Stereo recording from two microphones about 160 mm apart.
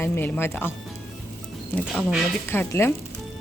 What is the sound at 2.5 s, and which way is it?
Speech, 15° left (ahead or behind).